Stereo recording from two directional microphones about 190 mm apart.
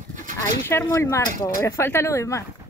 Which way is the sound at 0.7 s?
10° left (ahead or behind).